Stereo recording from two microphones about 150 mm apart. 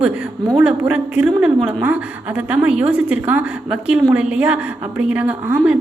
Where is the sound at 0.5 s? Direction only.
10° right (ahead or behind).